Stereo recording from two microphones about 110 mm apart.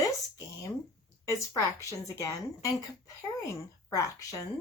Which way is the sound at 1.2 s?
30° left (ahead or behind).